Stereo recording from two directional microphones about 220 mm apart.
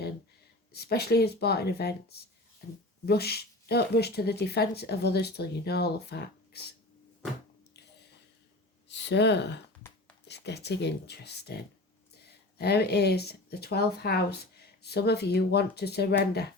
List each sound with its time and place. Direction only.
0.7 s speech: 45° left (ahead or behind)
8.9 s speech: 50° left (ahead or behind)